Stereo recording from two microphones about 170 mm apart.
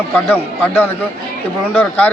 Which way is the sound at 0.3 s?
15° left (ahead or behind).